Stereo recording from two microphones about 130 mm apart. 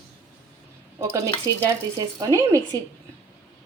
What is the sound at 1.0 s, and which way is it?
A woman's voice, 25° right (ahead or behind).